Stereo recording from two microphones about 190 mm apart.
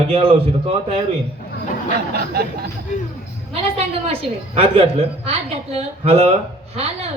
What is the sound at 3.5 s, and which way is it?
A woman's voice, 30° right (ahead or behind).